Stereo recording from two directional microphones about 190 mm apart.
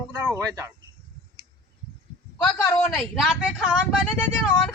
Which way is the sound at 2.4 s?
10° left (ahead or behind).